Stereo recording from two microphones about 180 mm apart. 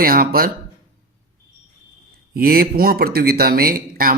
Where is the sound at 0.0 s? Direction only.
55° right (ahead or behind).